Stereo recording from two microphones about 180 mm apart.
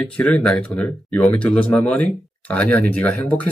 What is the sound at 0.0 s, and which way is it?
Speech, 5° left (ahead or behind).